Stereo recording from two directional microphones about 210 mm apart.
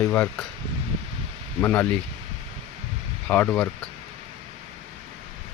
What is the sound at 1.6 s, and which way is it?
Speech, 5° left (ahead or behind).